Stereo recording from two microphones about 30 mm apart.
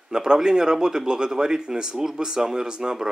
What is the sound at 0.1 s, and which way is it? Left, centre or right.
A man's voice, right.